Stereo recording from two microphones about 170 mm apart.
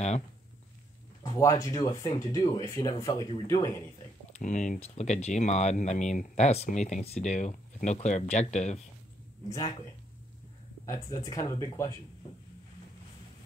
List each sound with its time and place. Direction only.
1.2 s speech: 20° left (ahead or behind)
4.4 s speech: 45° left (ahead or behind)
10.9 s speech: 20° left (ahead or behind)